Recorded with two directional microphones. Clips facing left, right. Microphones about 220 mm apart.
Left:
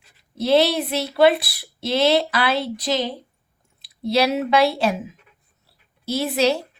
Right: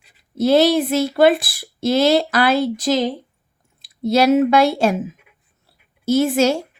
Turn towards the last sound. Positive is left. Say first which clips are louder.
# right 5 dB
turn(degrees=-45)  # may be behind; listen again after turning